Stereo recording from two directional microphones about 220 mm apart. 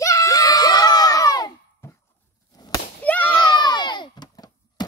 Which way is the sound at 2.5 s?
15° left (ahead or behind).